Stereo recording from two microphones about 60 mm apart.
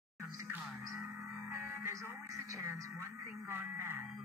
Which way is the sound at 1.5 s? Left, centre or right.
Right.